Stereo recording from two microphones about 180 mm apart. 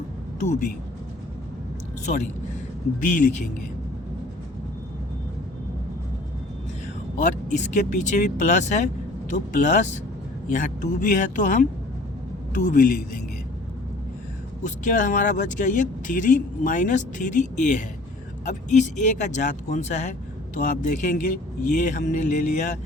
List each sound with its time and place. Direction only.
0.4 s speech: 40° left (ahead or behind)
3.2 s speech: 45° left (ahead or behind)
7.2 s speech: 45° left (ahead or behind)
12.6 s speech: 50° left (ahead or behind)
14.6 s speech: 45° left (ahead or behind)